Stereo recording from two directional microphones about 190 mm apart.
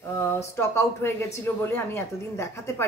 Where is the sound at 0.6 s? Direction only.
15° left (ahead or behind).